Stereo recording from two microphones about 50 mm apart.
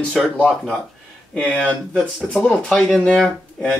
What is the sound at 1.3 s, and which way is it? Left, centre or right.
Speech, centre.